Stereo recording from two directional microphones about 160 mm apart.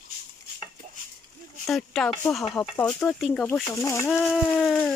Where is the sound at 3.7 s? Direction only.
20° left (ahead or behind).